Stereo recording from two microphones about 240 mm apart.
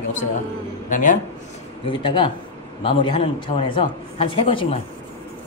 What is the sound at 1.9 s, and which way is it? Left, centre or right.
A man's voice, left.